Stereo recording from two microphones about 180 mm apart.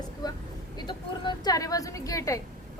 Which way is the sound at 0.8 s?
25° left (ahead or behind).